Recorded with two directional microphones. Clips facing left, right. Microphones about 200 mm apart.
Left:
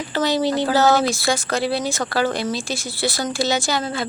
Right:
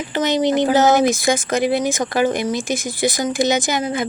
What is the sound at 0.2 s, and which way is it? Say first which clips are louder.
Speech: right 3 dB; 20° right (ahead or behind).